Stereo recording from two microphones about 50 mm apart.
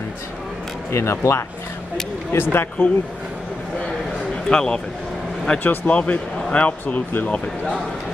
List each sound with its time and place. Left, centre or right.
0.9 s speech: left
2.3 s speech: left
4.5 s speech: centre
5.6 s speech: left